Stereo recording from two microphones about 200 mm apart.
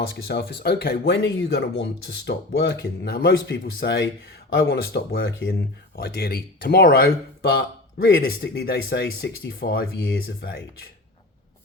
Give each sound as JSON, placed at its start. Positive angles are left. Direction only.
{"t": 0.1, "sound": "speech", "side_deg": 55}